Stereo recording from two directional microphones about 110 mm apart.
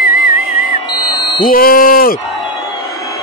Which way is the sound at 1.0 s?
40° left (ahead or behind).